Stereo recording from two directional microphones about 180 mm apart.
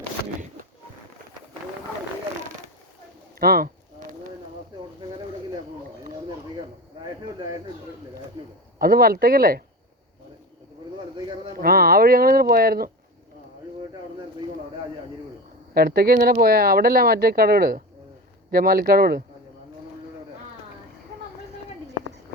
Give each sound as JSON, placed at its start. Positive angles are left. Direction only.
{"t": 3.3, "sound": "a sound", "side_deg": -55}
{"t": 8.8, "sound": "speech", "side_deg": -55}
{"t": 11.6, "sound": "speech", "side_deg": -55}
{"t": 15.7, "sound": "speech", "side_deg": -55}